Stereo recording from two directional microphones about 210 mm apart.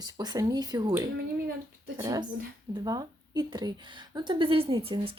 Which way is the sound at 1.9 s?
15° right (ahead or behind).